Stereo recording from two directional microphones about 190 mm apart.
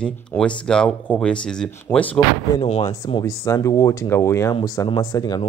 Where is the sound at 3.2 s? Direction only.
15° left (ahead or behind).